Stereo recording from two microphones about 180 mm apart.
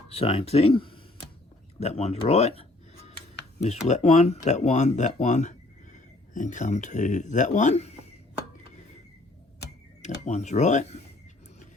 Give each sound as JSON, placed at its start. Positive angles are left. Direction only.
{"t": 0.1, "sound": "speech", "side_deg": 35}
{"t": 10.2, "sound": "speech", "side_deg": 40}